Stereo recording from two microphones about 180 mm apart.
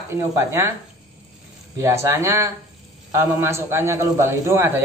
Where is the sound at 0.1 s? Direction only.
15° right (ahead or behind).